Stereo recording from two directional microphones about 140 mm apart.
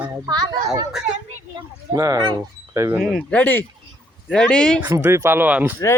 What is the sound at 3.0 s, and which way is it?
Speech, 5° left (ahead or behind).